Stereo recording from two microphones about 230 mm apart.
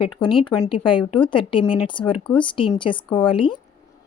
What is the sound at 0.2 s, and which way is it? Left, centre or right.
Speech, left.